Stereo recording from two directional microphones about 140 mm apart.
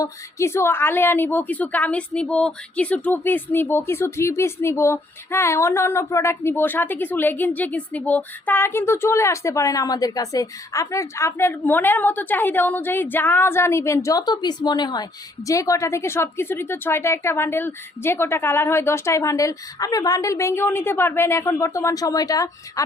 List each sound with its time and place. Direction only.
0.0 s a woman's voice: 20° left (ahead or behind)